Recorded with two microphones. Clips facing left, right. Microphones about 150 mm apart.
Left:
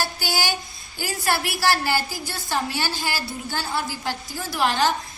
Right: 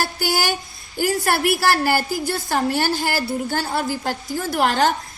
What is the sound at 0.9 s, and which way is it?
A woman's voice, 50° right (ahead or behind).